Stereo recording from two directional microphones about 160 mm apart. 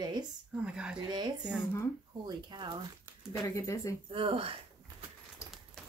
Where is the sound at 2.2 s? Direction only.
30° right (ahead or behind).